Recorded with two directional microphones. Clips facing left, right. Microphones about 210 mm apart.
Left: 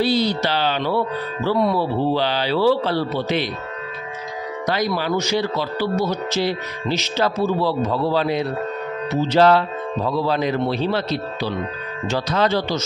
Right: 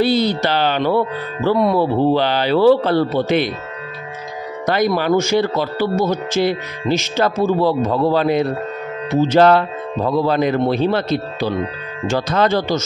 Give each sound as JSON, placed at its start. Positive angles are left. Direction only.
{"t": 0.0, "sound": "speech", "side_deg": -55}
{"t": 4.6, "sound": "speech", "side_deg": -55}